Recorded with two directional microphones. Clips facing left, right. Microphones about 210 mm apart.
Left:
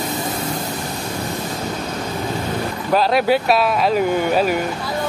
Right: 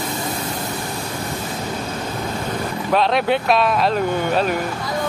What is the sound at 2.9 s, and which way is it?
Speech, 5° left (ahead or behind).